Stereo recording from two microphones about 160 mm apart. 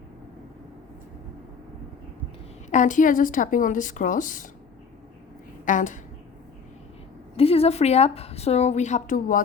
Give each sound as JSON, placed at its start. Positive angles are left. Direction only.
{"t": 2.6, "sound": "a woman's voice", "side_deg": 50}
{"t": 5.6, "sound": "a woman's voice", "side_deg": 55}
{"t": 7.3, "sound": "a woman's voice", "side_deg": 40}